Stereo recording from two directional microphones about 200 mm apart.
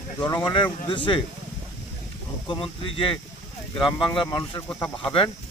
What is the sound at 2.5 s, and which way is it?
Speech, 25° left (ahead or behind).